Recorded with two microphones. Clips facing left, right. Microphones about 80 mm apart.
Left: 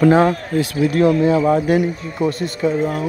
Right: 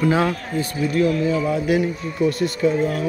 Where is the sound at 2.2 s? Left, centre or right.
Left.